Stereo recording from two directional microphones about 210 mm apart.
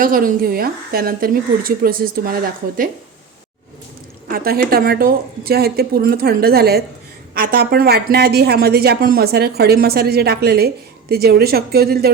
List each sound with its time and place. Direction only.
0.0 s speech: 45° right (ahead or behind)
4.3 s speech: 45° right (ahead or behind)